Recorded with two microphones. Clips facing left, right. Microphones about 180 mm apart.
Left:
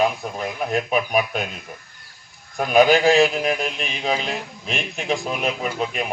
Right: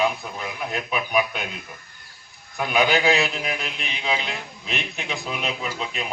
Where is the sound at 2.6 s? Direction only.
45° left (ahead or behind).